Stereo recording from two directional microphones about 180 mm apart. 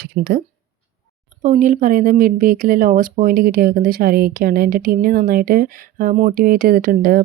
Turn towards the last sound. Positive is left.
turn(degrees=-55)  # may be behind; listen again after turning